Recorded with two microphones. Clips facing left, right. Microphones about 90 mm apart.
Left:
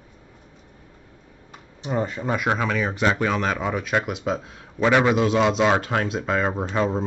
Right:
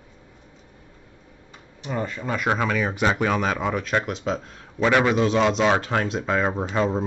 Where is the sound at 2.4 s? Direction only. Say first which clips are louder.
Right 2 dB; centre (ahead or behind).